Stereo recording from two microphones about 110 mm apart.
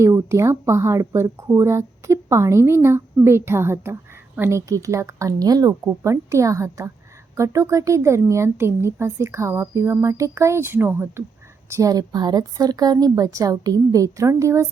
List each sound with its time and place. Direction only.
0.0 s speech: 25° right (ahead or behind)
11.7 s a woman's voice: 30° right (ahead or behind)